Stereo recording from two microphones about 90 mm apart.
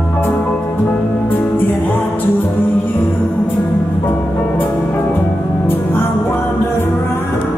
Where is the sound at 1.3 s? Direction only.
20° left (ahead or behind).